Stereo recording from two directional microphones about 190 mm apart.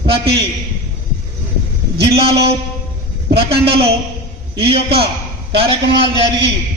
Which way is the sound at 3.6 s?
30° right (ahead or behind).